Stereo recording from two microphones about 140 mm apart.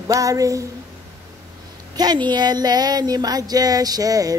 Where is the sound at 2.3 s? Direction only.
30° right (ahead or behind).